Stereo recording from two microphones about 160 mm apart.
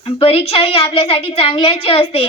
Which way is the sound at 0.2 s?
35° left (ahead or behind).